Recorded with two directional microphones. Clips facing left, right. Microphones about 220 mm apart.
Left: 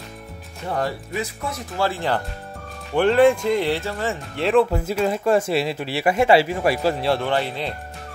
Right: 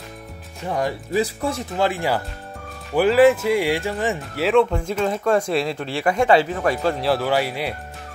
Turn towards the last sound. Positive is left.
turn(degrees=-10)  # may be behind; listen again after turning